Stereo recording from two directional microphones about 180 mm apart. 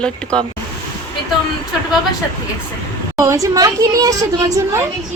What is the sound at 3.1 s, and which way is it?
Speech, 15° right (ahead or behind).